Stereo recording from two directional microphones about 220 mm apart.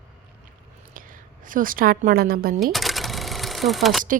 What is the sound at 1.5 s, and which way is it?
Speech, 40° right (ahead or behind).